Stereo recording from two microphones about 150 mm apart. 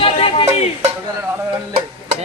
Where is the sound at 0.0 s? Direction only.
40° left (ahead or behind).